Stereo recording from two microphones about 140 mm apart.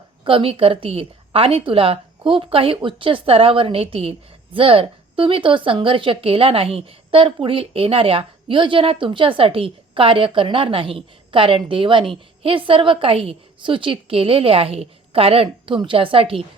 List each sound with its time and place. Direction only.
0.3 s a woman's voice: 40° right (ahead or behind)